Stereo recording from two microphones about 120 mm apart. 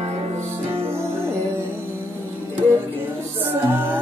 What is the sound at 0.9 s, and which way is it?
Music, 20° right (ahead or behind).